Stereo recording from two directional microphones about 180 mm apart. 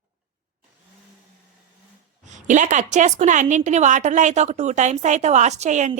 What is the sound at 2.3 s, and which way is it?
A woman's voice, 45° right (ahead or behind).